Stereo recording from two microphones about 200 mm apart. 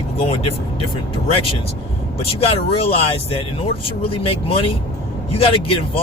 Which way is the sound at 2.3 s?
30° left (ahead or behind).